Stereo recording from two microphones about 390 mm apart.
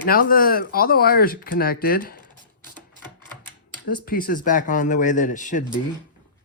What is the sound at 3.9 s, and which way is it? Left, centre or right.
Speech, left.